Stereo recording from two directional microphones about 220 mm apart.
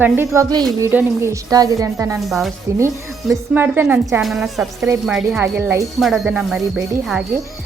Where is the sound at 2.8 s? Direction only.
15° right (ahead or behind).